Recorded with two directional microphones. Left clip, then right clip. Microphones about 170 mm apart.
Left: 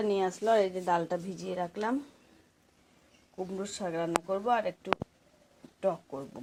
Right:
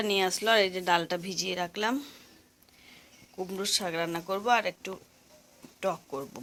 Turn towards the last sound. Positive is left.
turn(degrees=-10)  # may be behind; listen again after turning